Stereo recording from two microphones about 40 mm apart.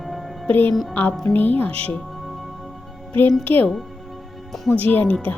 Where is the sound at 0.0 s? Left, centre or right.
Centre.